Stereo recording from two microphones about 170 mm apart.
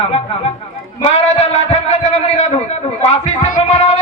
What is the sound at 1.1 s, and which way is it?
A man's voice, 40° left (ahead or behind).